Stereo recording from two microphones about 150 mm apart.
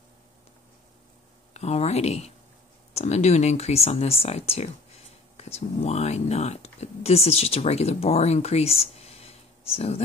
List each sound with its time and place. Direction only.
1.5 s speech: 45° left (ahead or behind)